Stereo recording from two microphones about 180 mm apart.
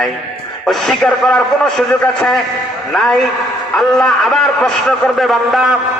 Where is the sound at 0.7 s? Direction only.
Centre (ahead or behind).